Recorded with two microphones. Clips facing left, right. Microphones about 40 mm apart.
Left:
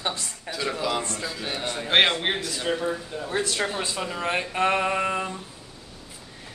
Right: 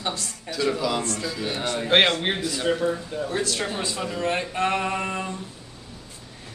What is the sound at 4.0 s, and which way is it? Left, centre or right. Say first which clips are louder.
Speech: right 2 dB; centre.